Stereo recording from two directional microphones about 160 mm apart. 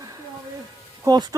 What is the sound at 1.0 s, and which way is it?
Speech, 25° right (ahead or behind).